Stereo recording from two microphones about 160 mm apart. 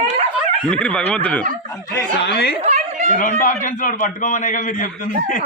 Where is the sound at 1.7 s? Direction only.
20° left (ahead or behind).